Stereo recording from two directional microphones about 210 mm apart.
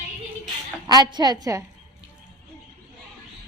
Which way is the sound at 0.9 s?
20° right (ahead or behind).